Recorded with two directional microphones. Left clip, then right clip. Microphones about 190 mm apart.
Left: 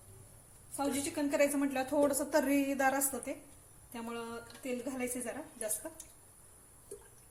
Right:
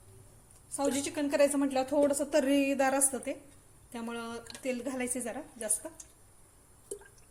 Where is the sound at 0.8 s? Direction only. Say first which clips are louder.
Right 3 dB; 30° right (ahead or behind).